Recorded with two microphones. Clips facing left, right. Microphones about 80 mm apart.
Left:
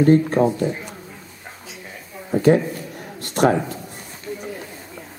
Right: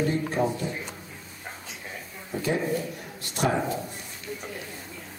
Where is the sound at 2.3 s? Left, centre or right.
Left.